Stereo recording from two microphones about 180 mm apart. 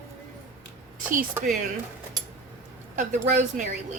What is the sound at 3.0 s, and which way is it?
Speech, 45° right (ahead or behind).